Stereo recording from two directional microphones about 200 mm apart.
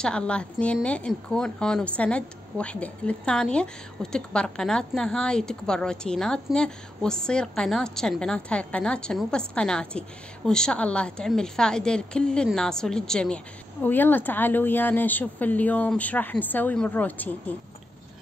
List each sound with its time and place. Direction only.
0.0 s a woman's voice: 5° left (ahead or behind)